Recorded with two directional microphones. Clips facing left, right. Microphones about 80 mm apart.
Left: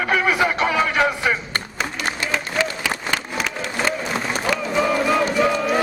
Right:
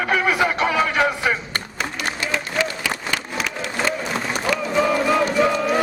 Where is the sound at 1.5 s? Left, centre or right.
Left.